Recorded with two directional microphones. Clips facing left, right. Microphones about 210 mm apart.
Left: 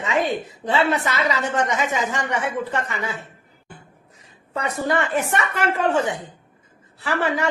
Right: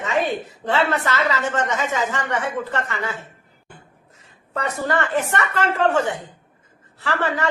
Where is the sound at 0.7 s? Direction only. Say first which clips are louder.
Even; 15° left (ahead or behind).